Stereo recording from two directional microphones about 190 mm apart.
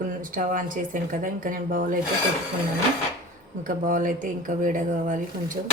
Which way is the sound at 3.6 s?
45° right (ahead or behind).